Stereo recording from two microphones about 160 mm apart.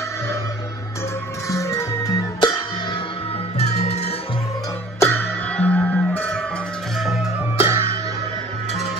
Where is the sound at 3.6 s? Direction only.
45° left (ahead or behind).